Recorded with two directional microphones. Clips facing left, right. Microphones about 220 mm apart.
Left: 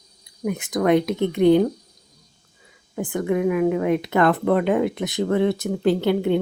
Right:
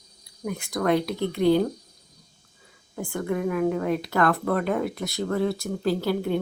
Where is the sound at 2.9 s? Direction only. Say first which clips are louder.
Left 5 dB; 15° left (ahead or behind).